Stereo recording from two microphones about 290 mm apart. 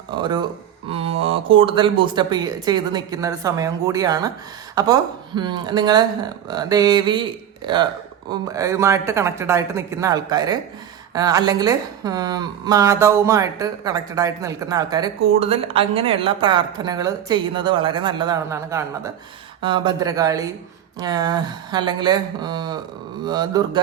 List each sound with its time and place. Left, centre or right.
0.2 s a woman's voice: centre
0.9 s mantra: centre
1.2 s a woman's voice: centre